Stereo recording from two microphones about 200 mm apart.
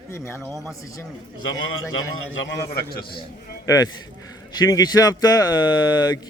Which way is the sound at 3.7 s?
20° left (ahead or behind).